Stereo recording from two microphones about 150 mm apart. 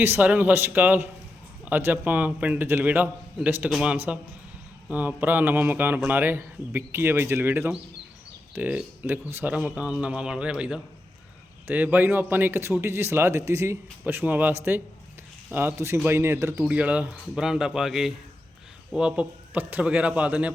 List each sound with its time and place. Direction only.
0.0 s speech: 10° right (ahead or behind)